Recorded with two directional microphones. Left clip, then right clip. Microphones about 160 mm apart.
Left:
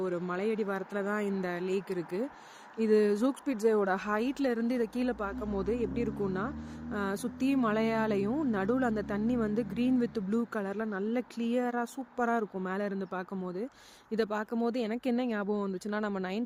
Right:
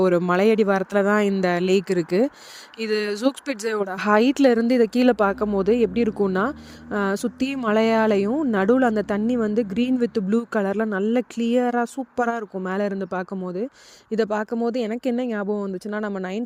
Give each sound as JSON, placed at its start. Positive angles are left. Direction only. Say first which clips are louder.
{"t": 0.0, "sound": "speech", "louder": "right 15 dB", "side_deg": -75}
{"t": 5.5, "sound": "speech", "louder": "right 13 dB", "side_deg": -55}